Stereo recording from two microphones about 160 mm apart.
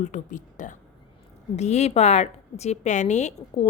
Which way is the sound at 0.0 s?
50° left (ahead or behind).